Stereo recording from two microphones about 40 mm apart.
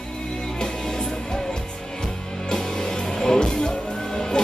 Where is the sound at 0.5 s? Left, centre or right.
Centre.